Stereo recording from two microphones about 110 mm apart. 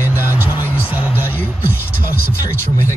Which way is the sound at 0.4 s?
15° right (ahead or behind).